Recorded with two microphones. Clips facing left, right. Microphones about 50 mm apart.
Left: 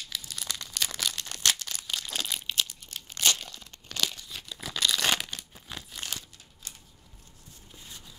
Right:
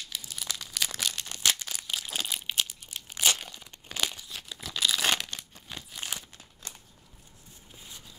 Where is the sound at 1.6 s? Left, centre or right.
Centre.